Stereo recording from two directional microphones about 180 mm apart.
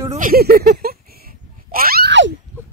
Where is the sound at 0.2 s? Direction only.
55° right (ahead or behind).